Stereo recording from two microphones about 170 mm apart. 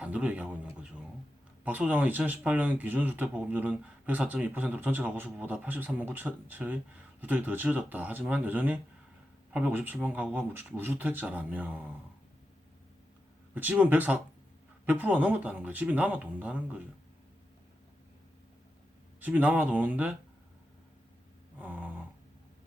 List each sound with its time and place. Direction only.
0.0 s speech: 5° right (ahead or behind)
13.5 s speech: 10° right (ahead or behind)
19.2 s speech: 10° right (ahead or behind)
21.6 s a sound: 10° right (ahead or behind)